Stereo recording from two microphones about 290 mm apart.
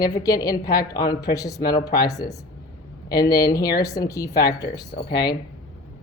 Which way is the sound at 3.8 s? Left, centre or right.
Centre.